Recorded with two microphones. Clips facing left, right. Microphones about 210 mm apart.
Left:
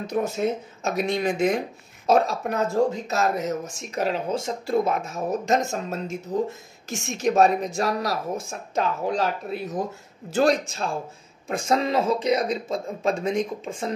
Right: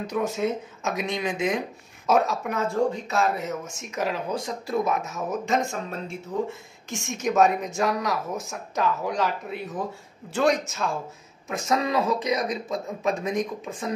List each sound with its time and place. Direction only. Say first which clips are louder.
0.1 s speech: left 2 dB; 40° left (ahead or behind)
2.0 s speech: left 2 dB; 30° left (ahead or behind)